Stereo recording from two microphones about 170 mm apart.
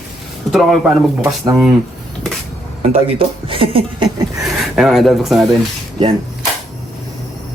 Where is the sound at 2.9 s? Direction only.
30° right (ahead or behind).